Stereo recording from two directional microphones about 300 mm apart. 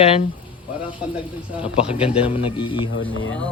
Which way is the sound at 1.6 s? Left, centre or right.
Centre.